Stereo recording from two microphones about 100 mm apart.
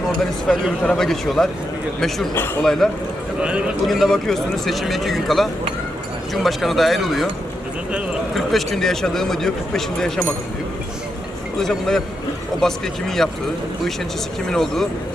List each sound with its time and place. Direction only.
0.2 s speech: 5° left (ahead or behind)
2.3 s a man's voice: 20° left (ahead or behind)
2.6 s speech: 5° left (ahead or behind)
3.4 s a man's voice: 10° right (ahead or behind)
3.8 s speech: centre (ahead or behind)
8.4 s speech: centre (ahead or behind)
11.6 s speech: 5° left (ahead or behind)
14.5 s speech: 5° left (ahead or behind)